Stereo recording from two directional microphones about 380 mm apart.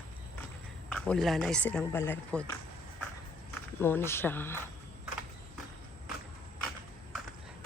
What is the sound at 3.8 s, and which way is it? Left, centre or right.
Speech, centre.